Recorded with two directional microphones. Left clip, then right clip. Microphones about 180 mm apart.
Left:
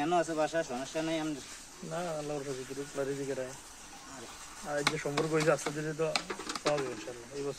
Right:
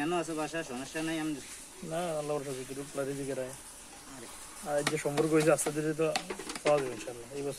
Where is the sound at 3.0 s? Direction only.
55° right (ahead or behind).